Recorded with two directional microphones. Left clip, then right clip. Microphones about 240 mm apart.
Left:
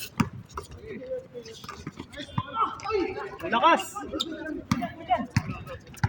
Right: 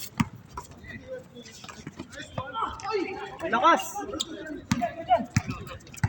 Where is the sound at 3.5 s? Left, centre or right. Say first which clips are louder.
Even; centre.